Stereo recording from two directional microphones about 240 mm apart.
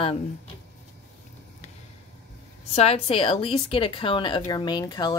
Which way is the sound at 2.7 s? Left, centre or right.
Left.